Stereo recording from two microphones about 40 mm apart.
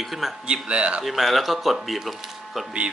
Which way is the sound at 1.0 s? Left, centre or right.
Centre.